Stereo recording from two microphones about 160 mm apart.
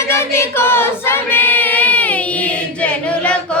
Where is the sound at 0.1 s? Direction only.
15° left (ahead or behind).